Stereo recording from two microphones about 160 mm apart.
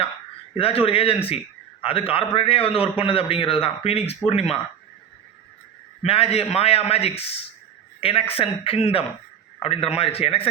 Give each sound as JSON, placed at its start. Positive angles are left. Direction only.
{"t": 0.5, "sound": "a man's voice", "side_deg": 35}
{"t": 6.0, "sound": "a man's voice", "side_deg": 40}